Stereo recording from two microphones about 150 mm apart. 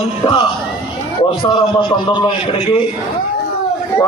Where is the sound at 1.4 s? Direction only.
30° left (ahead or behind).